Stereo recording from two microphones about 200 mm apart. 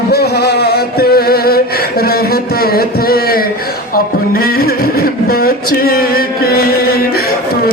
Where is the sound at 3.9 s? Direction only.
45° left (ahead or behind).